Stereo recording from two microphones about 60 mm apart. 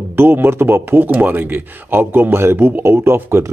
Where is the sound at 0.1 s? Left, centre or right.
Right.